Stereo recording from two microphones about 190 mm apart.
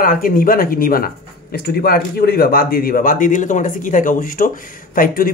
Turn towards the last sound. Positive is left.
turn(degrees=50)  # may be behind; listen again after turning